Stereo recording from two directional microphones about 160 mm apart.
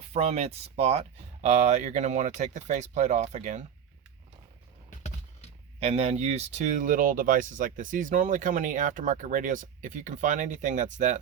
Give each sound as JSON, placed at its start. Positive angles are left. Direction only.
{"t": 0.1, "sound": "speech", "side_deg": -40}
{"t": 4.9, "sound": "a sound", "side_deg": 45}
{"t": 5.8, "sound": "speech", "side_deg": -40}